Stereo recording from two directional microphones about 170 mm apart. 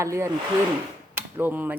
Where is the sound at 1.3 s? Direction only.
10° right (ahead or behind).